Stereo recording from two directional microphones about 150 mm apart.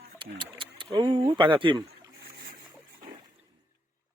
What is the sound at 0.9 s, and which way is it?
Speech, 35° right (ahead or behind).